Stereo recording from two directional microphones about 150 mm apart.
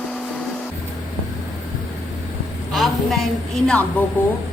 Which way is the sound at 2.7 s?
Centre (ahead or behind).